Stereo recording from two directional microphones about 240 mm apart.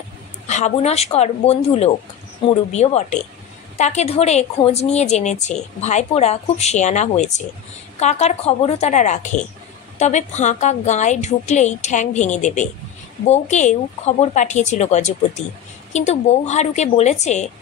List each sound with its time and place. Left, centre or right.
0.5 s a woman's voice: left